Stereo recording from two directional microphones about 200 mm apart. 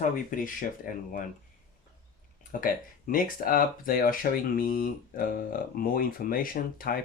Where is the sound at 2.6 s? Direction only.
45° left (ahead or behind).